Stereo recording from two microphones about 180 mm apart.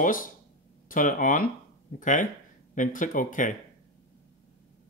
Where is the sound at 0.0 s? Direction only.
50° left (ahead or behind).